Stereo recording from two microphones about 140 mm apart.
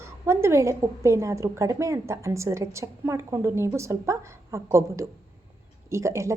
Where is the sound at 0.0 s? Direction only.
20° right (ahead or behind).